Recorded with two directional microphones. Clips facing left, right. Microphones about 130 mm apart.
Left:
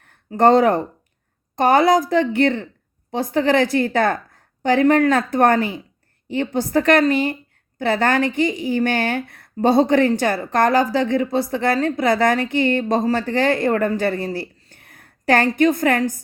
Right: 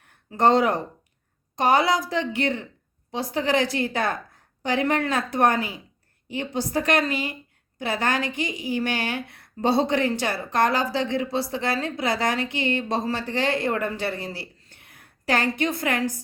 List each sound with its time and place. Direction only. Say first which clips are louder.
0.3 s a woman's voice: left 5 dB; 50° left (ahead or behind)